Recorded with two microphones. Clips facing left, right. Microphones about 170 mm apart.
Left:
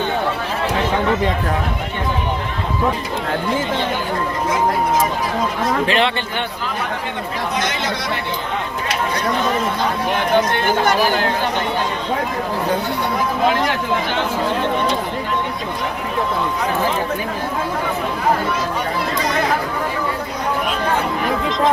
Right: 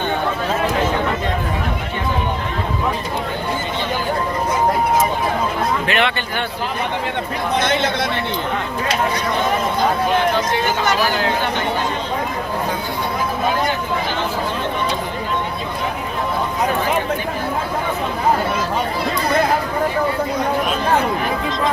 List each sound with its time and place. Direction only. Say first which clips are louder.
5.9 s speech: left 1 dB; 30° left (ahead or behind)
7.6 s speech: right 4 dB; 55° right (ahead or behind)
10.3 s speech: left 3 dB; 55° left (ahead or behind)
13.5 s speech: left 1 dB; 80° left